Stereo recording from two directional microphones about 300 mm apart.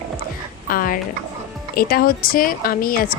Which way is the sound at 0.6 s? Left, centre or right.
Left.